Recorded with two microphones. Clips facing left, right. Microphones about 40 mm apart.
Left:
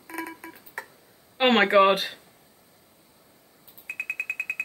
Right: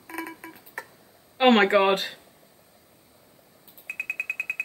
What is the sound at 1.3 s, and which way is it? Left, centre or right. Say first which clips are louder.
Speech: even; centre.